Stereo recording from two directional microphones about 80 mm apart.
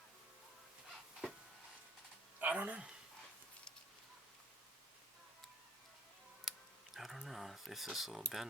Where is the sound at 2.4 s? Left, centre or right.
Centre.